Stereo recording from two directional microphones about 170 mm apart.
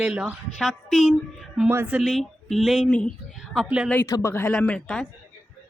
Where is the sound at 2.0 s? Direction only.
Centre (ahead or behind).